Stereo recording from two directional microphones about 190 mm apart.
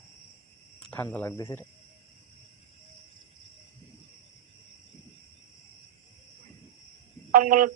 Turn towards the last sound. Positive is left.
turn(degrees=-45)  # may be behind; listen again after turning